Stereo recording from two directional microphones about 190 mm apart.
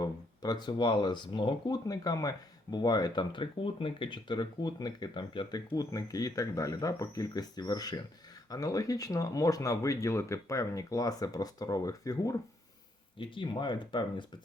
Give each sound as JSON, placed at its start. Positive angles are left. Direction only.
{"t": 0.0, "sound": "speech", "side_deg": 20}